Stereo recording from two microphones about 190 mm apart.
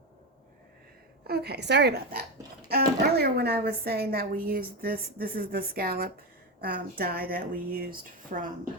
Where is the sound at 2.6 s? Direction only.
55° right (ahead or behind).